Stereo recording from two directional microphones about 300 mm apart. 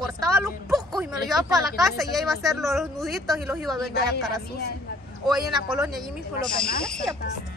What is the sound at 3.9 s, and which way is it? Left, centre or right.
Speech, left.